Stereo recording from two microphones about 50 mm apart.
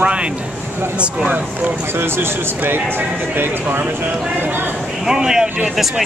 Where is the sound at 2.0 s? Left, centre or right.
Right.